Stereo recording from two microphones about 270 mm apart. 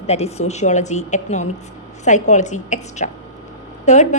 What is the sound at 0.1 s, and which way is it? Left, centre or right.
A woman's voice, left.